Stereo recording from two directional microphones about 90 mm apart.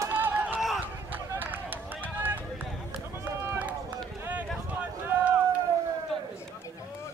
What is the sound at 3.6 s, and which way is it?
Run, 15° right (ahead or behind).